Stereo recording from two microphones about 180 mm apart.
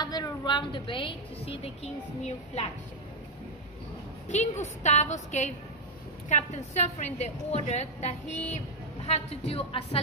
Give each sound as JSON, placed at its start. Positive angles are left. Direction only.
{"t": 0.0, "sound": "a woman's voice", "side_deg": 20}
{"t": 4.3, "sound": "a woman's voice", "side_deg": 40}